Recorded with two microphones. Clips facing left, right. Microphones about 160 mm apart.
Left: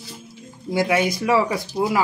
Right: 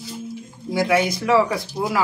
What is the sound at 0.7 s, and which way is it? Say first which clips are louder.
Speech: right 1 dB; 20° left (ahead or behind).